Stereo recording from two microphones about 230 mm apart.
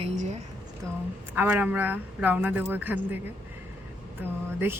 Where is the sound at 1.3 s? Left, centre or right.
Centre.